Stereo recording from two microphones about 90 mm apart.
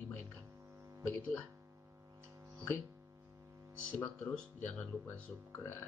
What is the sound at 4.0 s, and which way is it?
Speech, 15° left (ahead or behind).